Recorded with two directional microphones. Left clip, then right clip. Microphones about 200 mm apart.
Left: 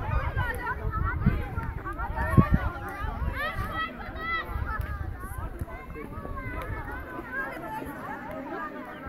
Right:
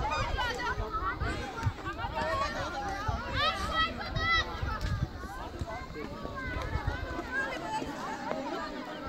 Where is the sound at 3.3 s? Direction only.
55° right (ahead or behind).